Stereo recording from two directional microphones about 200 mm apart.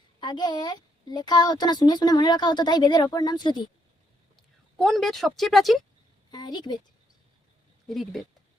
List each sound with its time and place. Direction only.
0.2 s speech: 20° left (ahead or behind)
4.8 s speech: centre (ahead or behind)
6.3 s a woman's voice: 20° left (ahead or behind)
7.9 s speech: centre (ahead or behind)